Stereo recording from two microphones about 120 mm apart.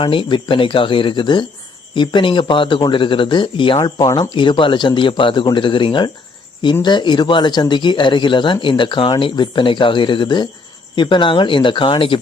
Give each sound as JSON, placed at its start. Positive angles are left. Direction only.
{"t": 0.0, "sound": "speech", "side_deg": 45}